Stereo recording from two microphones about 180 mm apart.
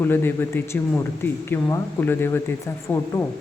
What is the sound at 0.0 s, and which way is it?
Speech, 10° left (ahead or behind).